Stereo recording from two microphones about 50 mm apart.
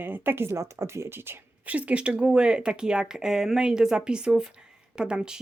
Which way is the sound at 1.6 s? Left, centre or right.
Right.